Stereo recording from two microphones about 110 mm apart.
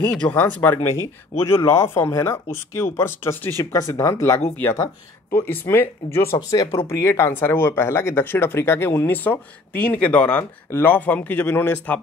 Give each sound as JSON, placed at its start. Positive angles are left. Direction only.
{"t": 0.1, "sound": "speech", "side_deg": 10}